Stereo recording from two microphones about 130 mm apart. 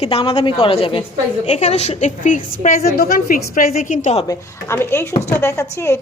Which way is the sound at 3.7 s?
65° left (ahead or behind).